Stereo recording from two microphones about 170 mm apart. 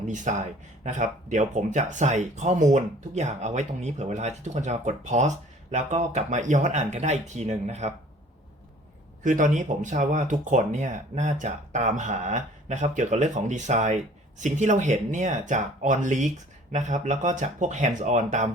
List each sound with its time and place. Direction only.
0.0 s speech: 45° right (ahead or behind)
9.2 s speech: 50° right (ahead or behind)